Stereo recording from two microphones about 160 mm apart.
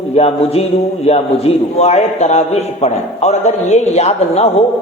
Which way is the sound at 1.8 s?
45° left (ahead or behind).